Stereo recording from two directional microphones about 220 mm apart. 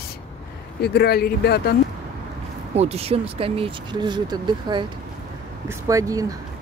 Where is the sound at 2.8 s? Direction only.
30° right (ahead or behind).